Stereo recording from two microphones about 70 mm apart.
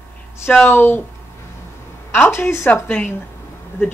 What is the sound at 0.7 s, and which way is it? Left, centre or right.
Speech, left.